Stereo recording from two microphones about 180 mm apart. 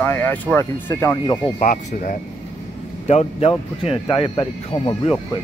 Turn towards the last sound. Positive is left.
turn(degrees=30)  # may be behind; listen again after turning